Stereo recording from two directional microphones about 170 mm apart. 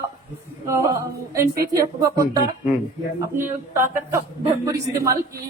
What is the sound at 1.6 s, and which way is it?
A woman's voice, 20° right (ahead or behind).